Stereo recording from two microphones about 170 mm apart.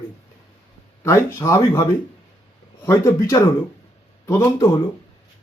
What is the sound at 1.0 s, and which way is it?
A man's voice, 15° left (ahead or behind).